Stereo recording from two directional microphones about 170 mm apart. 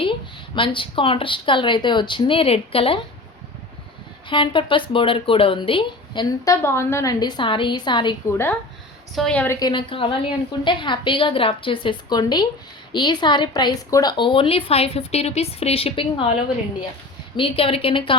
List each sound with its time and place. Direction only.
0.0 s speech: 30° left (ahead or behind)
4.3 s speech: 30° left (ahead or behind)
8.3 s a woman's voice: 15° left (ahead or behind)
9.6 s speech: 25° left (ahead or behind)
17.3 s speech: 30° left (ahead or behind)